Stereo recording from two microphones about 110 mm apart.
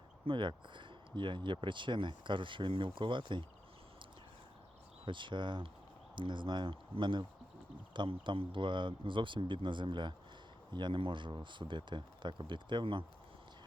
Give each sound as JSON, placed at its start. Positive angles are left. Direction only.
{"t": 0.3, "sound": "speech", "side_deg": -45}
{"t": 5.0, "sound": "speech", "side_deg": -45}